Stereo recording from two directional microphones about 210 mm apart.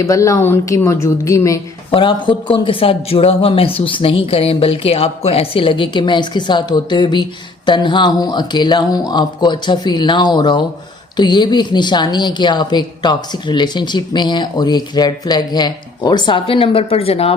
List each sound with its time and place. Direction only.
0.0 s a woman's voice: 15° left (ahead or behind)